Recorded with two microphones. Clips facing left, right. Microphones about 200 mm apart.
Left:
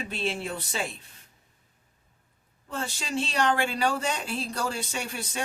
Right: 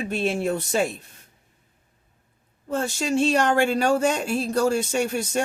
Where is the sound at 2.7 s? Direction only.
45° right (ahead or behind).